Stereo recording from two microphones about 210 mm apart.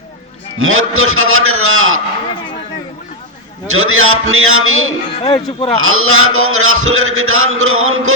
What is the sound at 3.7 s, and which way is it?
A man's voice, 75° right (ahead or behind).